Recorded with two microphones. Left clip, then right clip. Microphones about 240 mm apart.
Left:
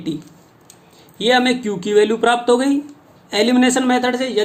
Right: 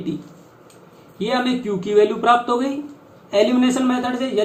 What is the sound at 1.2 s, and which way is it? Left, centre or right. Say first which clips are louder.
Speech: left 6 dB; left.